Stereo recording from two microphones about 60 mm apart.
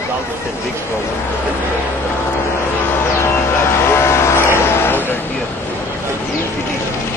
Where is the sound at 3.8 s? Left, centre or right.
Left.